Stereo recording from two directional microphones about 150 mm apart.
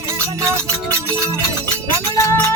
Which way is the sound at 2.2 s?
20° left (ahead or behind).